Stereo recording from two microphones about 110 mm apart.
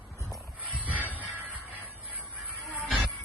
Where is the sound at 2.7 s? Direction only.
10° right (ahead or behind).